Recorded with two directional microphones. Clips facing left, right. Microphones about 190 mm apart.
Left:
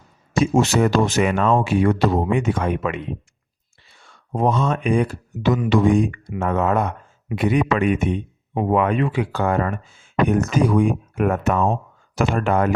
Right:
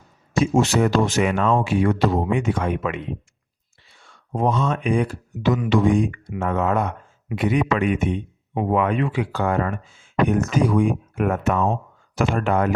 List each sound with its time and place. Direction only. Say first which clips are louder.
0.3 s speech: left 1 dB; 45° left (ahead or behind)
4.3 s speech: left 2 dB; 40° left (ahead or behind)